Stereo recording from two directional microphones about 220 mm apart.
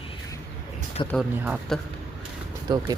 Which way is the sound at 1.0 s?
20° left (ahead or behind).